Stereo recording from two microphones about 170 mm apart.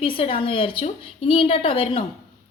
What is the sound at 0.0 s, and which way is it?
A woman's voice, 30° left (ahead or behind).